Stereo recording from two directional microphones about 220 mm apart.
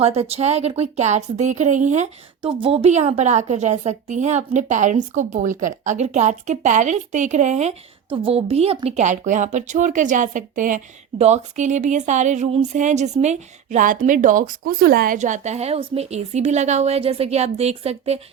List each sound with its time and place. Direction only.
0.0 s a woman's voice: 30° right (ahead or behind)